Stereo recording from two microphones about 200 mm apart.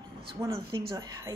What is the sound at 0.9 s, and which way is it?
Speech, 15° right (ahead or behind).